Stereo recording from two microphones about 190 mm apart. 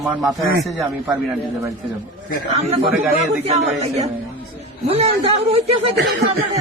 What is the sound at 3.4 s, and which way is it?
A man's voice, 35° right (ahead or behind).